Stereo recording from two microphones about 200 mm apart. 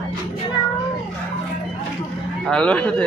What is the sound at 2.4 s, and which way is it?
Speech, 5° left (ahead or behind).